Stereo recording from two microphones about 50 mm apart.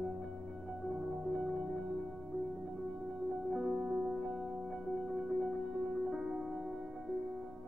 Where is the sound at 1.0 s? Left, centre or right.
Centre.